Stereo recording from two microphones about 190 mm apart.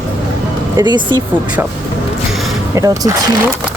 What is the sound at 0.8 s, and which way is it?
Speech, 20° right (ahead or behind).